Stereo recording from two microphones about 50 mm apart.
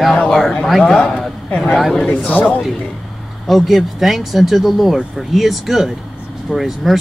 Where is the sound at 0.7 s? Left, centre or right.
Centre.